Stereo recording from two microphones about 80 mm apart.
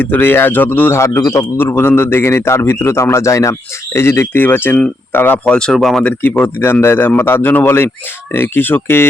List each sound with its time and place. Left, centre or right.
0.0 s a man's voice: left
0.9 s a man's voice: left
1.2 s a man's voice: left
1.5 s a man's voice: left
5.5 s speech: centre
6.0 s speech: centre
6.3 s a man's voice: left